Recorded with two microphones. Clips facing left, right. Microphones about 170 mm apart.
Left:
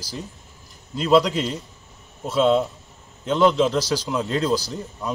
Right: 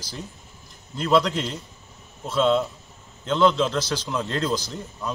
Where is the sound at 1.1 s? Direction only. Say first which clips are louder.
Left 3 dB; 15° left (ahead or behind).